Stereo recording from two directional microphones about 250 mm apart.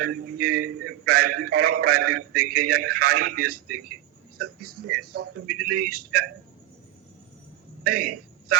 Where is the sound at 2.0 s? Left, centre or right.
Right.